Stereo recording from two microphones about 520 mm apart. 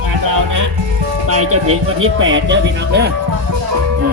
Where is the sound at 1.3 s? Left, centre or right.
Right.